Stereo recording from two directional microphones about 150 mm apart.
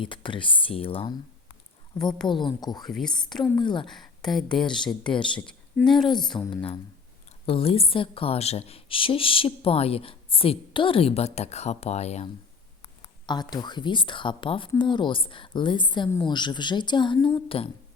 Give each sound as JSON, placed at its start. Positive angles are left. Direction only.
{"t": 0.0, "sound": "a woman's voice", "side_deg": 35}
{"t": 2.2, "sound": "speech", "side_deg": 30}
{"t": 2.8, "sound": "speech", "side_deg": 0}
{"t": 3.1, "sound": "a woman's voice", "side_deg": 30}
{"t": 3.8, "sound": "speech", "side_deg": 5}
{"t": 6.5, "sound": "a woman's voice", "side_deg": 35}
{"t": 12.8, "sound": "a woman's voice", "side_deg": 30}